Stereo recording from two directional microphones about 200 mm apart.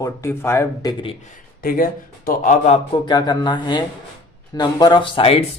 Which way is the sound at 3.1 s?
20° left (ahead or behind).